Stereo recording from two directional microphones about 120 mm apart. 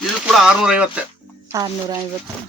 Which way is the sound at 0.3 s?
5° right (ahead or behind).